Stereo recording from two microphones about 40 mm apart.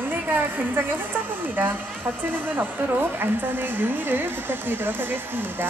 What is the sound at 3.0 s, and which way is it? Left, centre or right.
A woman's voice, right.